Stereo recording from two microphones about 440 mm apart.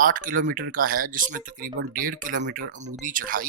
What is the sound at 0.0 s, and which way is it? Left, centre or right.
Speech, centre.